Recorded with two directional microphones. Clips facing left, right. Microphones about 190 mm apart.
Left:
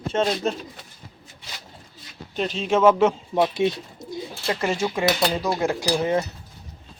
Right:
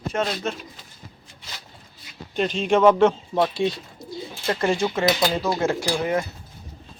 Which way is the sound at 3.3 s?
20° left (ahead or behind).